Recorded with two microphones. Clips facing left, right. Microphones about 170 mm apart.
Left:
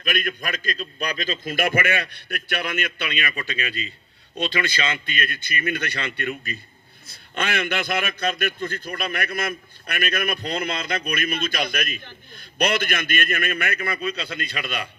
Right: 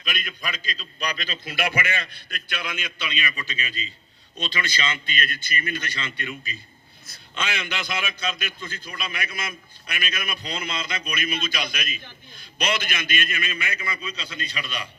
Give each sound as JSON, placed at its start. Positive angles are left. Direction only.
{"t": 0.0, "sound": "a man's voice", "side_deg": 50}